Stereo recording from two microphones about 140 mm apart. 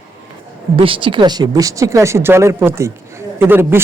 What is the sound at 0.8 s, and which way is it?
A man's voice, 40° right (ahead or behind).